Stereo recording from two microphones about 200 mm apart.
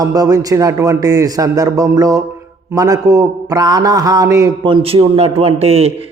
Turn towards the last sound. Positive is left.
turn(degrees=-30)  # may be behind; listen again after turning